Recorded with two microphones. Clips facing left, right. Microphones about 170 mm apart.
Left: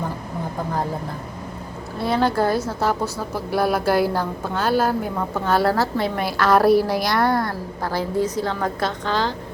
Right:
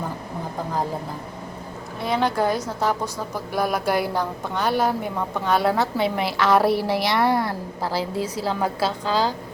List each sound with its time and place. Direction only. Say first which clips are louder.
2.0 s speech: left 3 dB; 15° right (ahead or behind)
3.5 s a woman's voice: left 3 dB; 5° left (ahead or behind)